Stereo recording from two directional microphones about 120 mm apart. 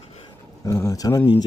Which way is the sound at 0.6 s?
25° left (ahead or behind).